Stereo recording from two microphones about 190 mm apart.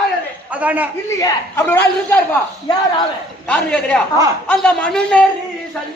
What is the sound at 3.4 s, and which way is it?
A man's voice, 5° left (ahead or behind).